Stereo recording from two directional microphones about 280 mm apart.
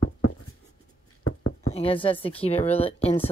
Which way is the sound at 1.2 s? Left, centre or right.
Left.